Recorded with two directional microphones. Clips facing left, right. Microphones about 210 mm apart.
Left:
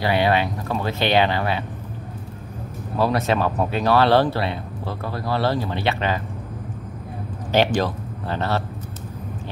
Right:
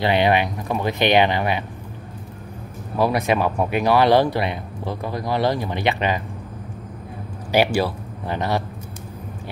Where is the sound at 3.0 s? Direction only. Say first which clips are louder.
Right 1 dB; 15° right (ahead or behind).